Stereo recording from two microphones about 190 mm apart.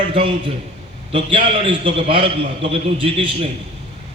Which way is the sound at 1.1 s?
25° right (ahead or behind).